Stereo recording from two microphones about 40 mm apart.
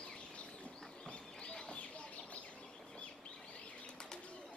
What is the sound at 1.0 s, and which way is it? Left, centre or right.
Bird, left.